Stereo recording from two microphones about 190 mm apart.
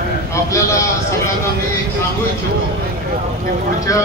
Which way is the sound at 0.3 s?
15° left (ahead or behind).